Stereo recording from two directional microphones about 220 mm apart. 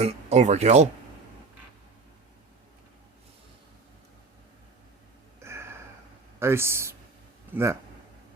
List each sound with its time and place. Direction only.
0.0 s speech: 30° right (ahead or behind)
5.4 s a sound: 10° right (ahead or behind)
6.4 s speech: 10° right (ahead or behind)